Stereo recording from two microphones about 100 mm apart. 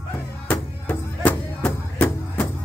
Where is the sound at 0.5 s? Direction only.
15° left (ahead or behind).